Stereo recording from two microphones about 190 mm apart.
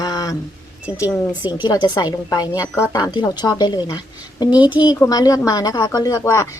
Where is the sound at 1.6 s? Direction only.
25° left (ahead or behind).